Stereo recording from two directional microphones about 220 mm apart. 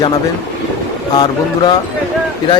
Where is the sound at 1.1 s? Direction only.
20° left (ahead or behind).